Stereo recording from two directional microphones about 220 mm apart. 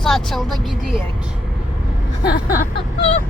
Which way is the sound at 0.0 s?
Centre (ahead or behind).